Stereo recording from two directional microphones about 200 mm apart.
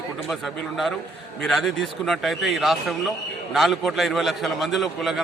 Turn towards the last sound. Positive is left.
turn(degrees=0)  # may be behind; listen again after turning